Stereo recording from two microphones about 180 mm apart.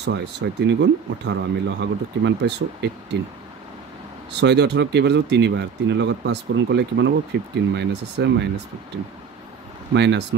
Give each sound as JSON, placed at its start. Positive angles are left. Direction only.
{"t": 0.0, "sound": "speech", "side_deg": -75}
{"t": 4.3, "sound": "speech", "side_deg": -70}
{"t": 9.9, "sound": "speech", "side_deg": -75}